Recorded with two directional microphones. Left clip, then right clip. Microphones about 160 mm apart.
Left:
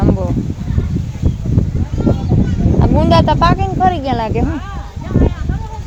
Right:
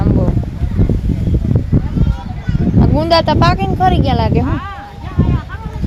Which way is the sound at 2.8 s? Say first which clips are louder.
Even; centre (ahead or behind).